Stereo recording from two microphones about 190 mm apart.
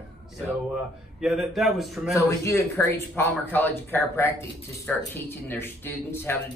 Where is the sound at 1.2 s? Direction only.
Centre (ahead or behind).